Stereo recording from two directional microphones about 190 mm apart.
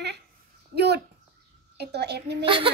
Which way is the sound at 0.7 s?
60° right (ahead or behind).